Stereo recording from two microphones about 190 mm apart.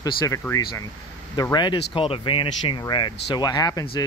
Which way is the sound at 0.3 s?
15° left (ahead or behind).